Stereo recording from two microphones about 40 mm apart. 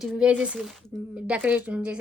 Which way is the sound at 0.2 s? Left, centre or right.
Right.